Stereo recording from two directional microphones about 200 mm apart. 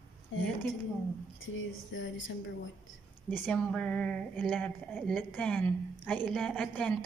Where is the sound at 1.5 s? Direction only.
70° left (ahead or behind).